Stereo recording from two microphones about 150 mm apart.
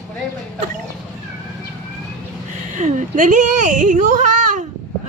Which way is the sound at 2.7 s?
55° right (ahead or behind).